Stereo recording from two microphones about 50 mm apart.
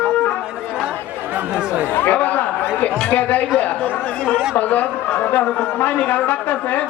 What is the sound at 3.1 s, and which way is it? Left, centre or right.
A man's voice, left.